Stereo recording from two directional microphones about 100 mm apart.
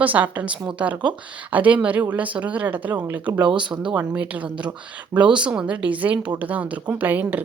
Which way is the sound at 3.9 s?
15° right (ahead or behind).